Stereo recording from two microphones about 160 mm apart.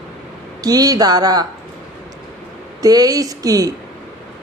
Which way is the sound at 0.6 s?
25° right (ahead or behind).